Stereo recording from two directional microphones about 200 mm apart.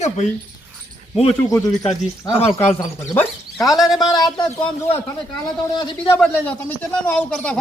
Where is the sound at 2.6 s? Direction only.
10° left (ahead or behind).